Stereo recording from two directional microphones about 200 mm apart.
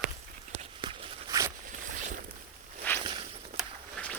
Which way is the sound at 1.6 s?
45° right (ahead or behind).